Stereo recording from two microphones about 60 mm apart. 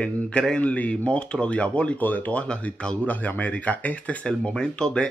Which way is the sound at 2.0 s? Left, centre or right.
Left.